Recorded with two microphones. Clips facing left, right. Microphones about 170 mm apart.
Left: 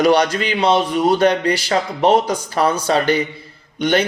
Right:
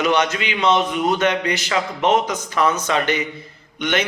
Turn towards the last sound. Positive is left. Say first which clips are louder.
# left 5 dB
turn(degrees=35)  # may be behind; listen again after turning